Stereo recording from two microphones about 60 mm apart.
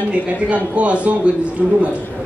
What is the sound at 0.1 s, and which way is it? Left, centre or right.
A man's voice, right.